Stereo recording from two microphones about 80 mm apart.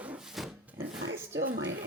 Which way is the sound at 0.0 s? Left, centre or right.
Centre.